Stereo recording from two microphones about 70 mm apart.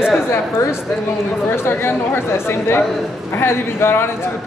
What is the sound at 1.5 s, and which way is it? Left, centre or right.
Speech, left.